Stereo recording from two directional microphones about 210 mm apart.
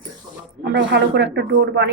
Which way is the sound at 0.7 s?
55° right (ahead or behind).